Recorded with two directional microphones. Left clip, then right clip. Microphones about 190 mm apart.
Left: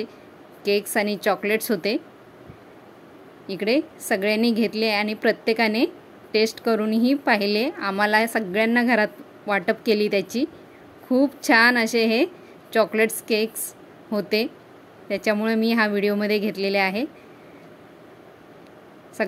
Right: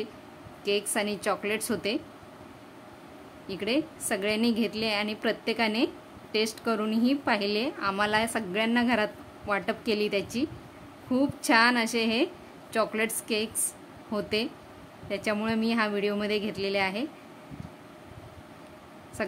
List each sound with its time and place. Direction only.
0.7 s a woman's voice: 25° left (ahead or behind)
3.4 s a woman's voice: 25° left (ahead or behind)